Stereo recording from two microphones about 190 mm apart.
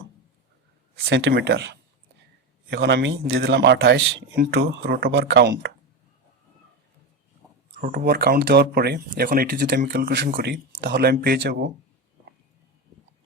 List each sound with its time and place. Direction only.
1.3 s speech: 65° right (ahead or behind)
7.8 s speech: 45° right (ahead or behind)